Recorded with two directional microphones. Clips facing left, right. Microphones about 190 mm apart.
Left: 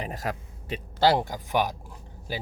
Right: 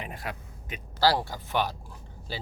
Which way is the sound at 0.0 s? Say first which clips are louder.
Left 5 dB; 40° left (ahead or behind).